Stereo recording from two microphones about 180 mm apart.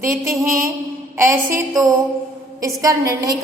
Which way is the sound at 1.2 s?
15° right (ahead or behind).